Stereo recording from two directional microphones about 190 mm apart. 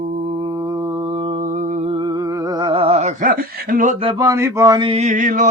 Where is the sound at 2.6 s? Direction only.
30° right (ahead or behind); by 4.0 s 45° right (ahead or behind).